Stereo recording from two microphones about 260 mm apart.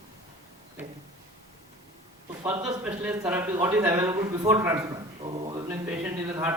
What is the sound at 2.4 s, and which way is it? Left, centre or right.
Speech, centre.